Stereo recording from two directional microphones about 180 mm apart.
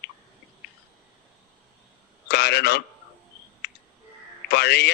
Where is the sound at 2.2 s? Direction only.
65° left (ahead or behind).